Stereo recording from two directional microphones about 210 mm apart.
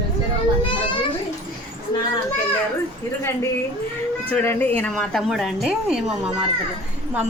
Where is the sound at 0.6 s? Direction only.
25° left (ahead or behind).